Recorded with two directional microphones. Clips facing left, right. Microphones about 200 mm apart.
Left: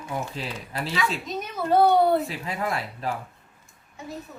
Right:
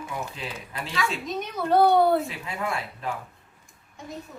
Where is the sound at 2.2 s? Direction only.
35° left (ahead or behind).